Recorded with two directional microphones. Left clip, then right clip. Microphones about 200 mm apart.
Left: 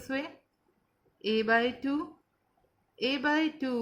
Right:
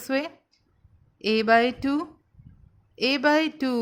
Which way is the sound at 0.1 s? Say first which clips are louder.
Right 8 dB; 50° right (ahead or behind).